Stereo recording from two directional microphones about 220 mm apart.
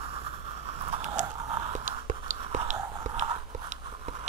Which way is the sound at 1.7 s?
35° right (ahead or behind).